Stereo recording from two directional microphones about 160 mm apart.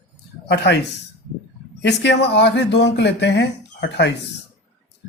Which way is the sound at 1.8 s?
90° left.